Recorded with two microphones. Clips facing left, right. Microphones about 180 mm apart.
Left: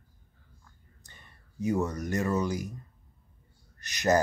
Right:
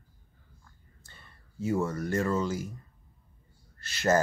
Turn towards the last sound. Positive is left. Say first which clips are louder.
# even
turn(degrees=15)  # may be behind; listen again after turning